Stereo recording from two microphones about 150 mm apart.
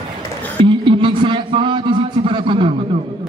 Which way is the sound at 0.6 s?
35° right (ahead or behind).